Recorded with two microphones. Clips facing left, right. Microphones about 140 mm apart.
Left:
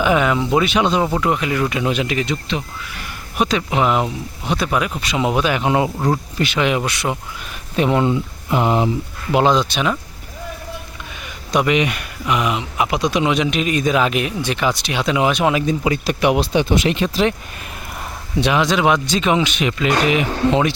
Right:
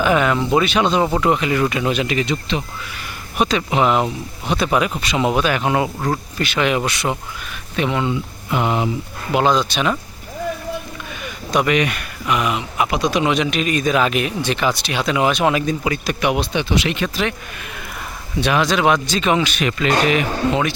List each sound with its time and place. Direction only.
0.0 s speech: 10° left (ahead or behind)
1.0 s speech: centre (ahead or behind)
1.8 s speech: 10° left (ahead or behind)
7.8 s speech: 35° left (ahead or behind)
11.5 s speech: 15° left (ahead or behind)
15.8 s speech: 25° left (ahead or behind)
18.3 s speech: 20° left (ahead or behind)
20.5 s speech: 30° left (ahead or behind)